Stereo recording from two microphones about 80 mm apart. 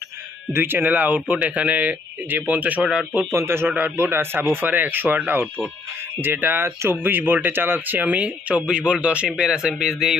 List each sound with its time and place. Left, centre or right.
0.5 s speech: right
3.3 s a man's voice: right; by 10.1 s centre